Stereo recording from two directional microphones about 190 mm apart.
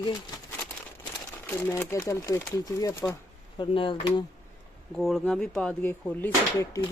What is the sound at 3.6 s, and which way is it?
Speech, 25° left (ahead or behind).